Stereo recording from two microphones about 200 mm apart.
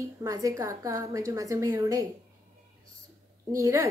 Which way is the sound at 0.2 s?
15° right (ahead or behind).